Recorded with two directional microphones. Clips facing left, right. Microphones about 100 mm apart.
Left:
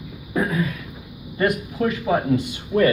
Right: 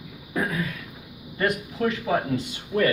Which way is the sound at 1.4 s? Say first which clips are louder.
Left 3 dB; 20° left (ahead or behind).